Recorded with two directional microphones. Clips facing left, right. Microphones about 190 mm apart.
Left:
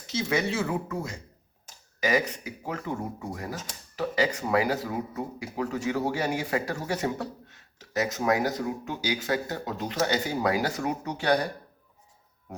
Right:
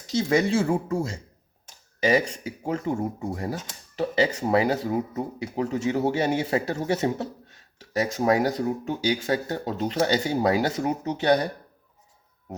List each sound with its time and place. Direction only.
0.1 s speech: 35° right (ahead or behind)